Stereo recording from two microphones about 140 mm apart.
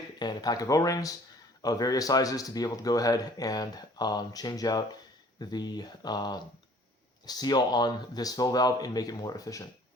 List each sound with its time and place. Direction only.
0.2 s speech: 30° left (ahead or behind)